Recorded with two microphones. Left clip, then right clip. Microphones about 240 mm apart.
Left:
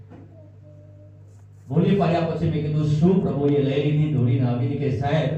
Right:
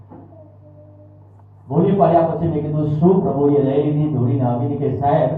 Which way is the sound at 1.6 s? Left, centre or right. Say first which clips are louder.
Right 7 dB; left.